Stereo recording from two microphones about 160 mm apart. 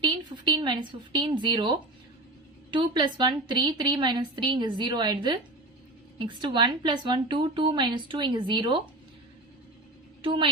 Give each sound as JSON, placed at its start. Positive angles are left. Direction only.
{"t": 0.0, "sound": "a woman's voice", "side_deg": -25}
{"t": 10.2, "sound": "a woman's voice", "side_deg": -30}